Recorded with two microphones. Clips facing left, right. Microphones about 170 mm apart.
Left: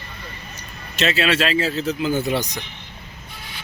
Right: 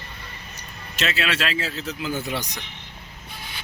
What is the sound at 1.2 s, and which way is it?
Speech, 35° left (ahead or behind).